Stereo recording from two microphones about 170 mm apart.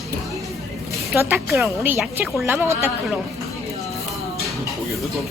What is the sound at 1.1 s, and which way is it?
A woman's voice, 15° right (ahead or behind).